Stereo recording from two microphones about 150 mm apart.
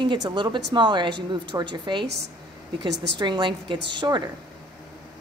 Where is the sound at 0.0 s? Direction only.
30° right (ahead or behind).